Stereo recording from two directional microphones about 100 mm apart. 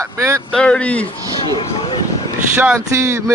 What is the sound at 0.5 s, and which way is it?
Speech, 10° left (ahead or behind).